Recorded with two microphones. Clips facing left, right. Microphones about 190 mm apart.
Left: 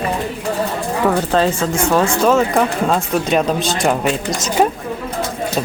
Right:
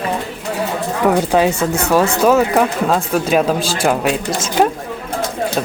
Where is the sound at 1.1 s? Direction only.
15° right (ahead or behind).